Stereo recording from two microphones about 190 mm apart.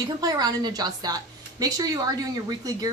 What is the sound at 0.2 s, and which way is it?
A woman's voice, 20° right (ahead or behind).